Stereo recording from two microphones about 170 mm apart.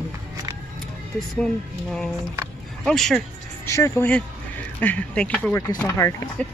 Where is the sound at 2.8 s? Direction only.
5° left (ahead or behind).